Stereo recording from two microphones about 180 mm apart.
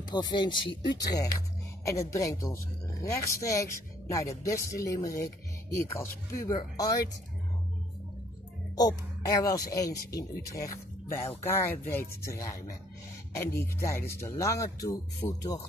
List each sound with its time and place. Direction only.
0.1 s speech: 25° left (ahead or behind)
9.4 s speech: 20° left (ahead or behind)